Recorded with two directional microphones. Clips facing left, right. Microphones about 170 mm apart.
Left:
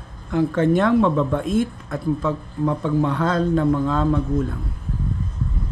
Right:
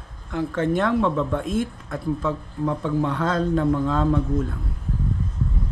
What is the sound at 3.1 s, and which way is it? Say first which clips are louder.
Speech: left 2 dB; 90° left.